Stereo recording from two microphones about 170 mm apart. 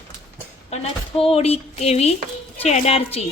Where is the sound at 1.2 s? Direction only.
35° left (ahead or behind).